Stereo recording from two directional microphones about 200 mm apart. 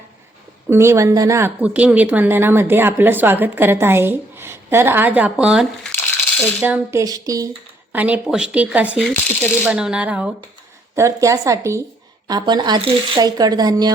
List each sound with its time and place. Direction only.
0.7 s speech: 15° right (ahead or behind)